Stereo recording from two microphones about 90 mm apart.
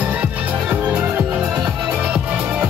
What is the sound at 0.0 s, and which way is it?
Music, 15° right (ahead or behind).